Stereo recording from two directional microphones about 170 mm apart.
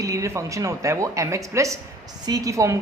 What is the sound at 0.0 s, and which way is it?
A woman's voice, 20° right (ahead or behind).